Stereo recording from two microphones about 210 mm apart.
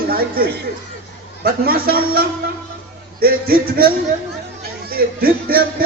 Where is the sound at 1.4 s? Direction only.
45° right (ahead or behind).